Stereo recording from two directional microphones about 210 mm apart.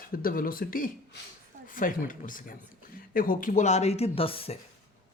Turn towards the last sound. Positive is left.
turn(degrees=25)  # may be behind; listen again after turning